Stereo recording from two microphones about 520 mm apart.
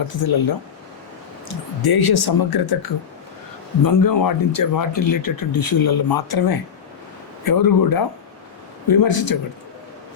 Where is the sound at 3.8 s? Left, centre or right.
Left.